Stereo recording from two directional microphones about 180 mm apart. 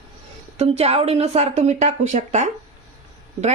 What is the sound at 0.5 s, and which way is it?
Speech, 35° right (ahead or behind).